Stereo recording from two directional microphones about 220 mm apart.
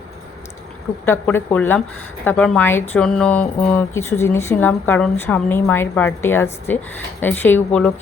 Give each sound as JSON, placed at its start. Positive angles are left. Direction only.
{"t": 1.0, "sound": "speech", "side_deg": 10}